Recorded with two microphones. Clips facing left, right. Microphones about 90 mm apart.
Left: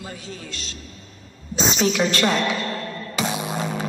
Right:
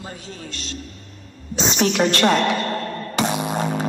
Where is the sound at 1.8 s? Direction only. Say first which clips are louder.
Right 3 dB; 55° right (ahead or behind).